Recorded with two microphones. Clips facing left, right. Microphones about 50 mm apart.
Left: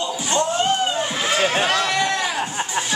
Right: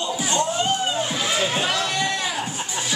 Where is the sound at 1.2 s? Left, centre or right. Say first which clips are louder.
Left 6 dB; left.